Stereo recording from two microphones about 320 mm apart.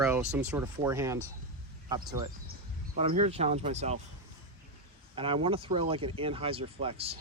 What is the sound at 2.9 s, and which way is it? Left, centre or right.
Speech, centre.